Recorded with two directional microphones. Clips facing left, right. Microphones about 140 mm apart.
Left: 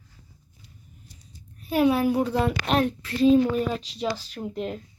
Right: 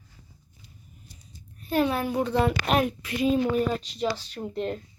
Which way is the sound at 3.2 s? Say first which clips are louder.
Left 4 dB; 5° right (ahead or behind).